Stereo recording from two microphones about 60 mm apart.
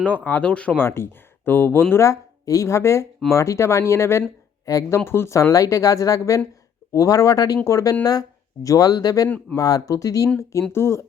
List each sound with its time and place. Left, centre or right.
0.0 s speech: left
0.8 s speech: left
2.0 s speech: left
4.6 s speech: left
4.9 s speech: left
5.3 s speech: left
7.6 s speech: left
8.6 s speech: left
10.5 s speech: left